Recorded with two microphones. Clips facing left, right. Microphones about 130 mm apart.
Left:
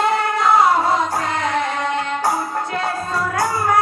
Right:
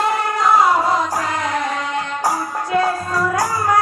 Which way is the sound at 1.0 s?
25° left (ahead or behind).